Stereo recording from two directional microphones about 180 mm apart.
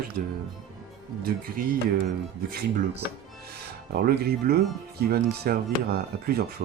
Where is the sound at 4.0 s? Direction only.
60° right (ahead or behind).